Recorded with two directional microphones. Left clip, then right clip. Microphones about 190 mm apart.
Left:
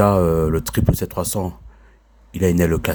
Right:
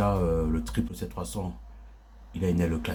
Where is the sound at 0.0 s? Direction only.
40° left (ahead or behind).